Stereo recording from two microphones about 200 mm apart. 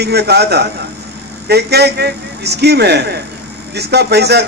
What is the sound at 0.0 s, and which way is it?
A man's voice, 55° right (ahead or behind).